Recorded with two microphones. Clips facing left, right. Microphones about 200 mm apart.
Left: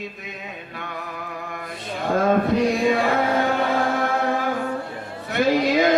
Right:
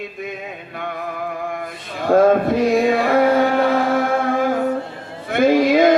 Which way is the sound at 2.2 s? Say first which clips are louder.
Right 4 dB; 55° right (ahead or behind).